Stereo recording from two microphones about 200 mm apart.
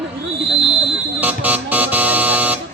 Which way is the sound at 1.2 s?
10° right (ahead or behind).